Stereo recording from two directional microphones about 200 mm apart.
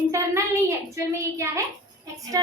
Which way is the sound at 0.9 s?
15° right (ahead or behind).